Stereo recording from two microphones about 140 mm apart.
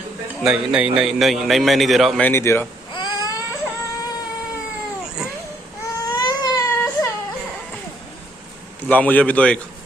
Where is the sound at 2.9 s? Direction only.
30° left (ahead or behind).